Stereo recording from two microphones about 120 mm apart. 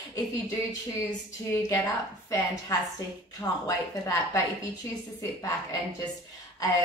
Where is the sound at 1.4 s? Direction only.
25° left (ahead or behind).